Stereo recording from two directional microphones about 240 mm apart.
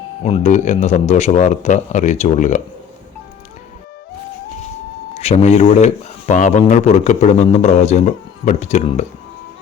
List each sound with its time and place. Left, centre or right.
0.2 s speech: left
5.1 s speech: left